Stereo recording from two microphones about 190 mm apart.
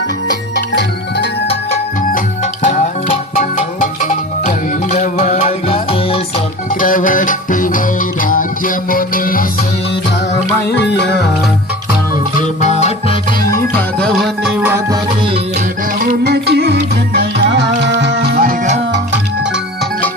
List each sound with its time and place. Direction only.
0.7 s music: 65° left (ahead or behind)
2.1 s music: 40° left (ahead or behind)
6.7 s music: 45° left (ahead or behind)
10.8 s music: 65° left (ahead or behind)
12.4 s music: 35° left (ahead or behind)
13.5 s music: 5° left (ahead or behind); by 14.9 s 10° right (ahead or behind)
16.0 s music: 60° right (ahead or behind); by 18.8 s 45° right (ahead or behind)